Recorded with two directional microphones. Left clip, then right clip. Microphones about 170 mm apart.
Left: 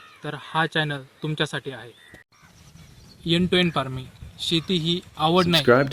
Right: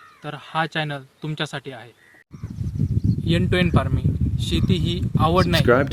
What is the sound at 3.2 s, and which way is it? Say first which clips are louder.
Speech: left 1 dB; 10° right (ahead or behind).